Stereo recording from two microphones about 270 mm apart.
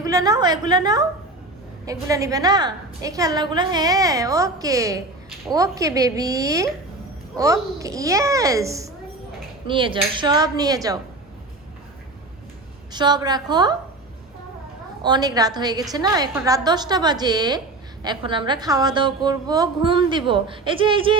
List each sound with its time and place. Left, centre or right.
0.0 s a woman's voice: centre
12.9 s a woman's voice: centre
15.0 s a woman's voice: centre